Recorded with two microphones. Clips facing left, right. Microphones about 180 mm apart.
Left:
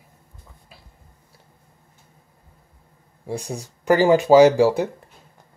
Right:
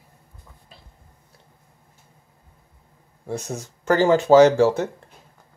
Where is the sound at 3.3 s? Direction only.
5° right (ahead or behind).